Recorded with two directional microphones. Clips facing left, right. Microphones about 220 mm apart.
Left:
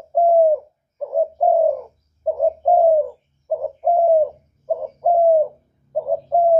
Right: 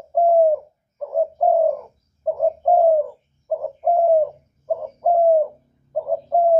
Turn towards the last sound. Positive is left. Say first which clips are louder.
# left 1 dB
turn(degrees=10)  # may be behind; listen again after turning